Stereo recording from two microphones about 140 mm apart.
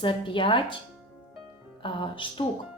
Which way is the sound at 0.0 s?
35° left (ahead or behind).